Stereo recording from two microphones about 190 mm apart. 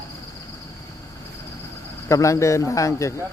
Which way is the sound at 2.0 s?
15° left (ahead or behind).